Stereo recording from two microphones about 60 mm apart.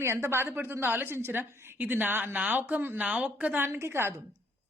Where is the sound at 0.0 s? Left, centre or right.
Right.